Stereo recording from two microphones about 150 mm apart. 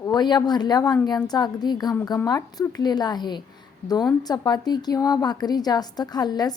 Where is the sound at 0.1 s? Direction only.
30° left (ahead or behind).